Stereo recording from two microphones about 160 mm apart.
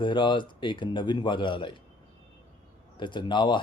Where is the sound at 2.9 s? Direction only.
30° left (ahead or behind).